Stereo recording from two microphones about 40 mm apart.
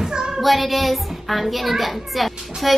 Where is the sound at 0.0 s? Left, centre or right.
Centre.